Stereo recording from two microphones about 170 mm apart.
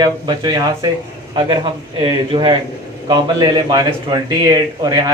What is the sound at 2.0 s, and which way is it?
Speech, 30° right (ahead or behind).